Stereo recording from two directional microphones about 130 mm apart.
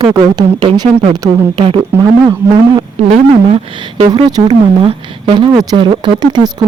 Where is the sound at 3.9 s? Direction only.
30° right (ahead or behind).